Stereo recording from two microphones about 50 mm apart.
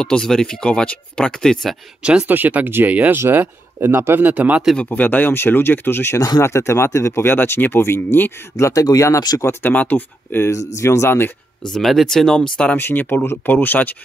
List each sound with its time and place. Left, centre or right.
0.0 s speech: centre
2.2 s speech: right
3.2 s speech: right
4.3 s speech: right
4.8 s speech: left
5.3 s speech: left
6.1 s speech: left
7.3 s speech: left
9.7 s speech: left
10.5 s speech: left
11.1 s speech: left
11.8 s speech: centre
12.7 s speech: left